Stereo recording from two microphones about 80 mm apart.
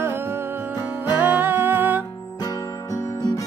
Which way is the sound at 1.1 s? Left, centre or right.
Right.